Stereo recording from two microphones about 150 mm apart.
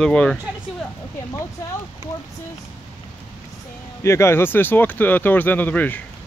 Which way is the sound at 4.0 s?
20° left (ahead or behind).